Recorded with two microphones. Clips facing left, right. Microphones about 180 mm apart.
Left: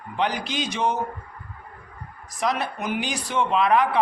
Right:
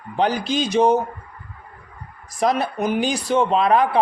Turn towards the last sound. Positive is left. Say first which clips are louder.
# right 3 dB
turn(degrees=-35)  # may be behind; listen again after turning